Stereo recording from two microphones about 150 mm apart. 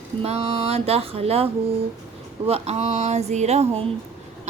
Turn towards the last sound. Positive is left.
turn(degrees=-45)  # may be behind; listen again after turning